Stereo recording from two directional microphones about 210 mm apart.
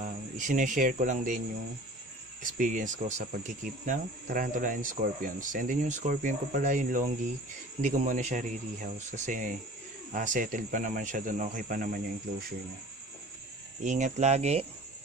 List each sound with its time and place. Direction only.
0.0 s speech: 35° right (ahead or behind)
2.5 s speech: 40° right (ahead or behind)
13.8 s speech: 35° right (ahead or behind)